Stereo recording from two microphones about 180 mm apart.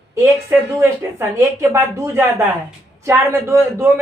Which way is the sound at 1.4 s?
15° right (ahead or behind).